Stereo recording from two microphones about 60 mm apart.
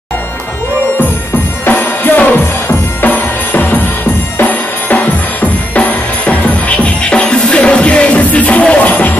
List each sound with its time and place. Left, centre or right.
1.7 s music: left